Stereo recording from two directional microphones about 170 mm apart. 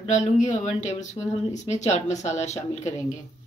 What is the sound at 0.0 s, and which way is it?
Speech, 45° left (ahead or behind).